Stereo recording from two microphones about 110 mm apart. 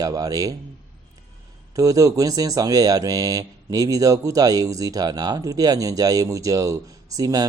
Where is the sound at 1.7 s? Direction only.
30° right (ahead or behind).